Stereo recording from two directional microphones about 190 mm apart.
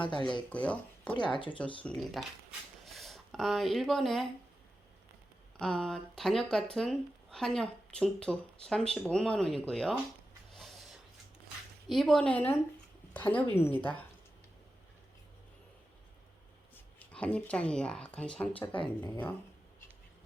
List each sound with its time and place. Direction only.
0.0 s speech: 25° left (ahead or behind)
0.5 s speech: 5° left (ahead or behind)
1.3 s speech: 25° left (ahead or behind)
1.8 s speech: 5° left (ahead or behind)
5.5 s speech: 5° left (ahead or behind)
10.5 s a sound: centre (ahead or behind)
11.9 s a woman's voice: centre (ahead or behind)
16.7 s speech: 5° left (ahead or behind)
18.7 s speech: 25° left (ahead or behind)